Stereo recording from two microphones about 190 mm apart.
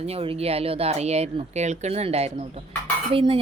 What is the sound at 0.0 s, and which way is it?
A woman's voice, 30° right (ahead or behind).